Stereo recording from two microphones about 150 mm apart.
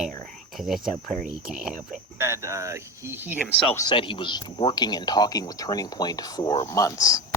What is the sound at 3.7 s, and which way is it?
Speech, 30° left (ahead or behind).